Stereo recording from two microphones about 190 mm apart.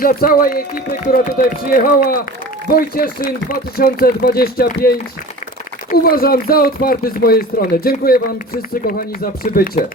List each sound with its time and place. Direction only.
0.0 s speech: 50° left (ahead or behind)